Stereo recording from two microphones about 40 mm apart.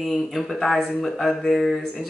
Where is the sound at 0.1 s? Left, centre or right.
Centre.